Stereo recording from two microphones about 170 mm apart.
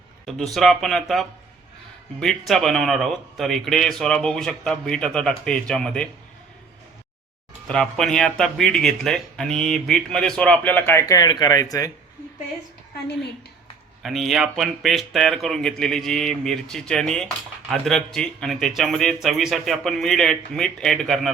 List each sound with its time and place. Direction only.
0.3 s speech: centre (ahead or behind)
7.7 s speech: 5° left (ahead or behind)
11.1 s speech: 25° left (ahead or behind)
14.0 s speech: centre (ahead or behind)